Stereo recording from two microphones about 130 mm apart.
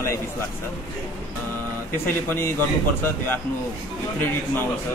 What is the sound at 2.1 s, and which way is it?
Speech, 15° left (ahead or behind).